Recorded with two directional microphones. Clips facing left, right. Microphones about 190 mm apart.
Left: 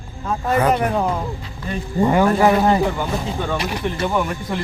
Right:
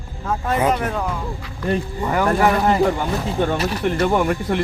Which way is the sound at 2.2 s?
20° left (ahead or behind).